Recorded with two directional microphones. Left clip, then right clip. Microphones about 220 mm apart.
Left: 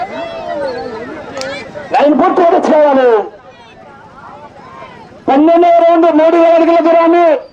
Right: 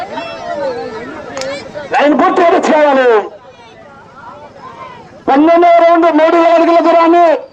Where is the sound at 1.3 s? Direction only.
15° right (ahead or behind).